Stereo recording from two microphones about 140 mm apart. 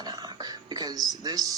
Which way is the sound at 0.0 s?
30° right (ahead or behind).